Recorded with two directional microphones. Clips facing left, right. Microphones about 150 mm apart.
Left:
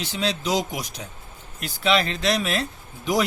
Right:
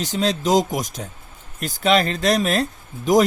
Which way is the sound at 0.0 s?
45° right (ahead or behind).